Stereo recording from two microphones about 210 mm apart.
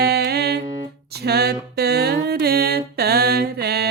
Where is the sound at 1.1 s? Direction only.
50° right (ahead or behind).